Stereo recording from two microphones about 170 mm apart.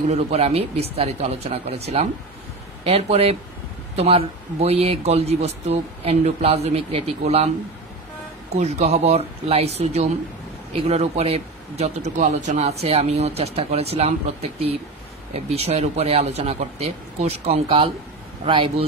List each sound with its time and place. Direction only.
0.1 s speech: 35° right (ahead or behind)
8.5 s speech: 40° right (ahead or behind)